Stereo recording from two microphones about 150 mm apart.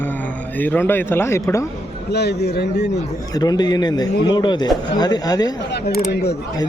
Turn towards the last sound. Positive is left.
turn(degrees=90)